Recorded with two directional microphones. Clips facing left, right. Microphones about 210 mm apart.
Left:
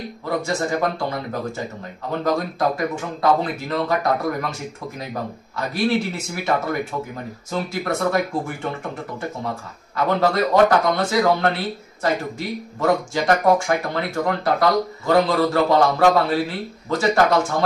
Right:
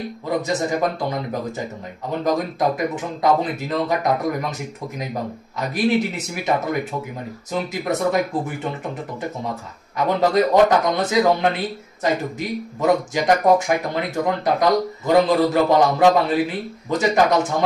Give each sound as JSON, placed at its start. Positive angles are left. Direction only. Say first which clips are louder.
{"t": 0.5, "sound": "a man's voice", "louder": "even", "side_deg": -20}
{"t": 2.2, "sound": "a man's voice", "louder": "right 1 dB", "side_deg": -15}
{"t": 9.9, "sound": "a man's voice", "louder": "right 1 dB", "side_deg": -15}